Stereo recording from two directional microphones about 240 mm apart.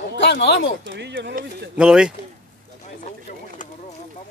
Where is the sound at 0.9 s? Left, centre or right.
Right.